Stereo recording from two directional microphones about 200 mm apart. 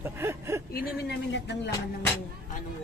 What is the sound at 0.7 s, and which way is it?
Speech, 50° left (ahead or behind).